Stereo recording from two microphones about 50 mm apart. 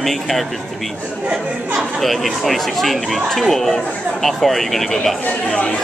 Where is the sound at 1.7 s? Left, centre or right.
Centre.